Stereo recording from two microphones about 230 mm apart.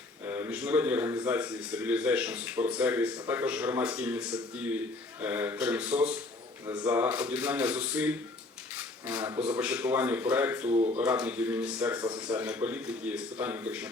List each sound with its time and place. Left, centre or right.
0.3 s a man's voice: centre
10.7 s speech: right
11.0 s speech: centre
11.9 s speech: centre
12.3 s speech: centre